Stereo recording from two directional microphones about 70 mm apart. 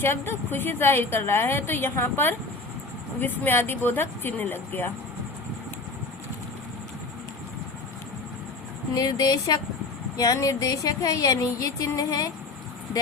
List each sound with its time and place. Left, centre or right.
0.0 s a woman's voice: left
9.0 s speech: left
10.3 s music: left